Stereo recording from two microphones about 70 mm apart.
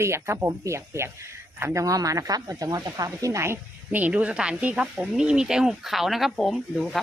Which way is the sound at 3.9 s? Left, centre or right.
Right.